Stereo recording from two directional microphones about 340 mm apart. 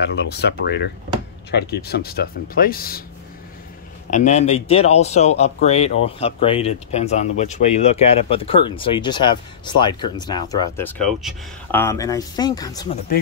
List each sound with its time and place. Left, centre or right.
0.0 s speech: left
4.1 s speech: left